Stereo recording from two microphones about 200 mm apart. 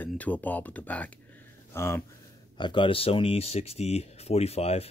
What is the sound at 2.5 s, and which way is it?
Speech, 25° left (ahead or behind).